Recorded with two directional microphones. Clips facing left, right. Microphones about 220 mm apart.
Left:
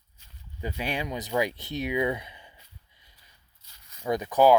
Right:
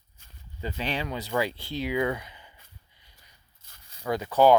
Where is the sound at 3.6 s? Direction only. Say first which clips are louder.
Right 3 dB; 50° right (ahead or behind).